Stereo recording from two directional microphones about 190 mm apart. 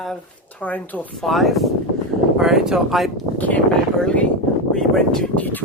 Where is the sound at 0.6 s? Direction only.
10° left (ahead or behind).